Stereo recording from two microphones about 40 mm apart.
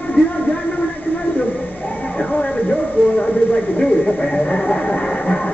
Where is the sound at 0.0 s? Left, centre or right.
Left.